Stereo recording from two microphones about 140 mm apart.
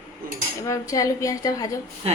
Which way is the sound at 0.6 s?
25° left (ahead or behind).